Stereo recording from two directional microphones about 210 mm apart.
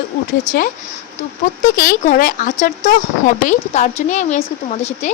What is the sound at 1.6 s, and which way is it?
A woman's voice, 40° left (ahead or behind).